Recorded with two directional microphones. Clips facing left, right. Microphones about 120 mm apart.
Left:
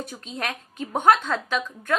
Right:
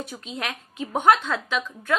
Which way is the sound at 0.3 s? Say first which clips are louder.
Left 2 dB; 45° left (ahead or behind).